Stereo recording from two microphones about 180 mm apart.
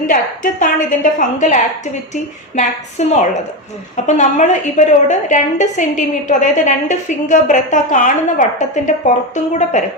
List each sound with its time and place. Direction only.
0.1 s a woman's voice: 45° left (ahead or behind)